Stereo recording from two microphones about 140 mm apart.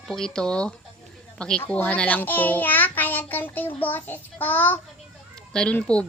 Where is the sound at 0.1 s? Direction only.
5° left (ahead or behind).